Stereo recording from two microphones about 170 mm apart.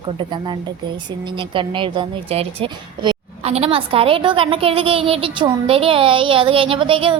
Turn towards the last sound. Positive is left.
turn(degrees=-30)  # may be behind; listen again after turning